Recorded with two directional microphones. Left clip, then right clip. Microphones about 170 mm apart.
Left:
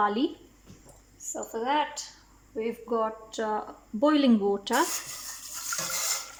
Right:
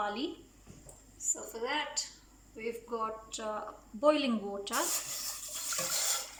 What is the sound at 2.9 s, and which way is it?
A woman's voice, 50° left (ahead or behind).